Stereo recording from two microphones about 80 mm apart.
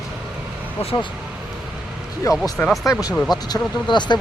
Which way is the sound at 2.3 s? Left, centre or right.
Left.